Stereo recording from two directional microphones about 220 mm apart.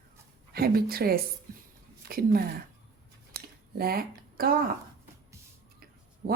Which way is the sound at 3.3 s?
45° right (ahead or behind).